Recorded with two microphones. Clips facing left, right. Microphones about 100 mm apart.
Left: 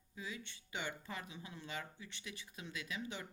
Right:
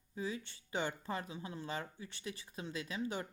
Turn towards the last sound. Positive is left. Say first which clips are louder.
# right 5 dB
turn(degrees=-35)  # may be behind; listen again after turning